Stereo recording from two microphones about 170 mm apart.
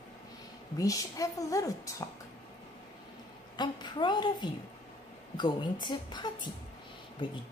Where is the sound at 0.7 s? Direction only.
20° left (ahead or behind).